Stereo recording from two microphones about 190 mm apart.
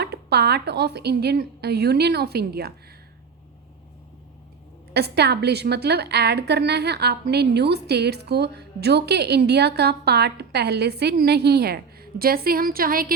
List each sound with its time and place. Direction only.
0.0 s a woman's voice: 60° right (ahead or behind)
4.9 s a woman's voice: 55° right (ahead or behind)